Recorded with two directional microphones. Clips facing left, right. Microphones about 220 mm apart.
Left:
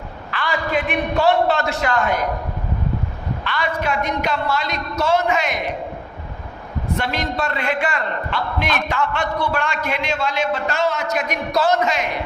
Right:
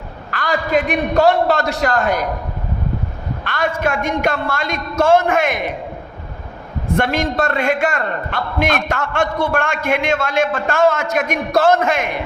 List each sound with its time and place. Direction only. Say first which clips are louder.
0.3 s a man's voice: right 4 dB; 45° right (ahead or behind)
3.4 s a man's voice: right 4 dB; 45° right (ahead or behind)
6.9 s a man's voice: right 6 dB; 50° right (ahead or behind)